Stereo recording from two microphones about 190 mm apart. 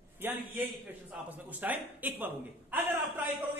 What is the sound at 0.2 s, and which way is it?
A man's voice, 10° right (ahead or behind).